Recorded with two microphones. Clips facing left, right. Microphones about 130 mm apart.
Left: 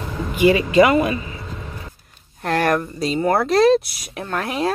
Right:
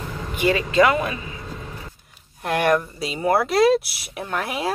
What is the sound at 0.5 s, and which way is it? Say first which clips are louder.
Speech: left 3 dB; 10° left (ahead or behind).